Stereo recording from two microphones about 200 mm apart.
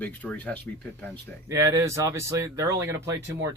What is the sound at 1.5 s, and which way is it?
Speech, 15° right (ahead or behind).